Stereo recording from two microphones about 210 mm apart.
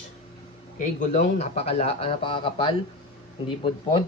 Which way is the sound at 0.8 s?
35° left (ahead or behind).